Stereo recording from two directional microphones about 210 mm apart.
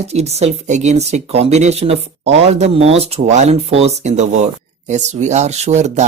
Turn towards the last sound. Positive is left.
turn(degrees=-35)  # may be behind; listen again after turning